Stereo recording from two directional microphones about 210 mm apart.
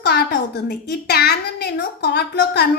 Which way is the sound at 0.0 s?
50° left (ahead or behind).